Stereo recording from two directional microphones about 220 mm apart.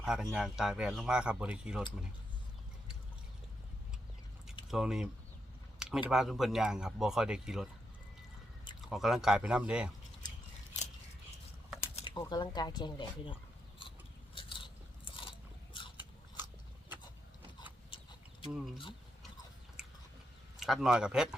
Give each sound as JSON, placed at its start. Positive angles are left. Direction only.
{"t": 0.0, "sound": "speech", "side_deg": -5}
{"t": 4.7, "sound": "speech", "side_deg": -5}
{"t": 8.9, "sound": "speech", "side_deg": 0}
{"t": 11.9, "sound": "speech", "side_deg": 20}
{"t": 14.3, "sound": "biting", "side_deg": 25}
{"t": 20.6, "sound": "speech", "side_deg": 0}